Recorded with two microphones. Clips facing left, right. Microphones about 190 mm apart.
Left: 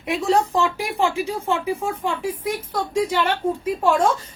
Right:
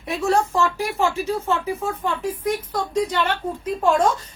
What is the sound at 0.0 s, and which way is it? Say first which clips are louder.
A woman's voice: left 1 dB; 15° left (ahead or behind).